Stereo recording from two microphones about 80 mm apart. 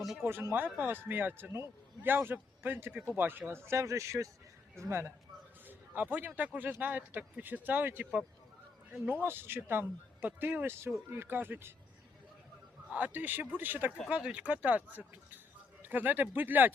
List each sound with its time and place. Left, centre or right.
0.2 s a man's voice: right
5.6 s speech: right
9.2 s speech: right
12.9 s speech: right